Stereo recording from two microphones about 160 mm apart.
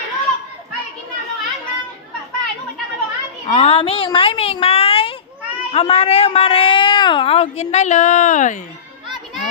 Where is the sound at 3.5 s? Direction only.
40° left (ahead or behind).